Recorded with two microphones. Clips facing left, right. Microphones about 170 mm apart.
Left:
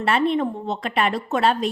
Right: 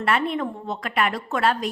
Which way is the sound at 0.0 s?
25° left (ahead or behind).